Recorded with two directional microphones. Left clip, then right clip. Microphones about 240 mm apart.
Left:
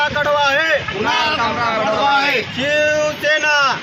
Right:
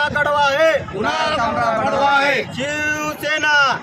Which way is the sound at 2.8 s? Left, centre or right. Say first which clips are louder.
Left 6 dB; right.